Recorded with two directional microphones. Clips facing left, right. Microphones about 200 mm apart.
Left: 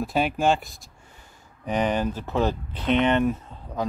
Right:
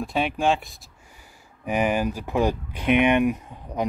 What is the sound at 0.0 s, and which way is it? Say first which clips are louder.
Speech: left 1 dB; centre (ahead or behind).